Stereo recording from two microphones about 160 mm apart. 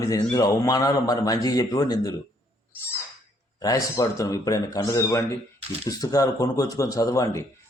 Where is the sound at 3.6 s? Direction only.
20° left (ahead or behind).